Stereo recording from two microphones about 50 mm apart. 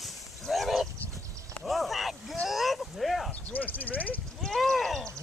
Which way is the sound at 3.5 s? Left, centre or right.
Left.